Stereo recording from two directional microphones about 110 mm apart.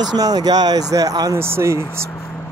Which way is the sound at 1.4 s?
25° right (ahead or behind).